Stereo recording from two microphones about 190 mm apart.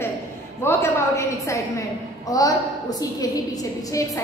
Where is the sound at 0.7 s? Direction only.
15° left (ahead or behind).